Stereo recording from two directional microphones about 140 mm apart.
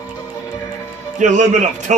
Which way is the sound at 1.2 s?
60° right (ahead or behind).